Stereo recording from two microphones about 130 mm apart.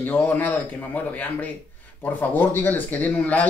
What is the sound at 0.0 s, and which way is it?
Speech, 15° left (ahead or behind).